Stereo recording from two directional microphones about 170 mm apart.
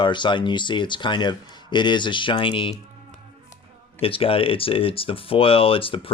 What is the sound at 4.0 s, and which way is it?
Speech, 35° left (ahead or behind).